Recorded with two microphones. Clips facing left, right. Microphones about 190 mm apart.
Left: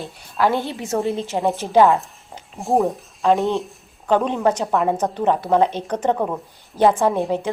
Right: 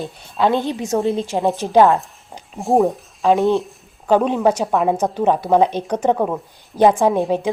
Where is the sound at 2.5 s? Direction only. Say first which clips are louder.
Right 3 dB; centre (ahead or behind).